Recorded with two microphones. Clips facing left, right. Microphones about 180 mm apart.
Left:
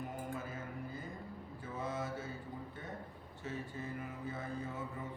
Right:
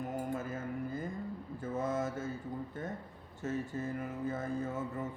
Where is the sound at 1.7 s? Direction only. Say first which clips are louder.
Right 6 dB; 45° right (ahead or behind).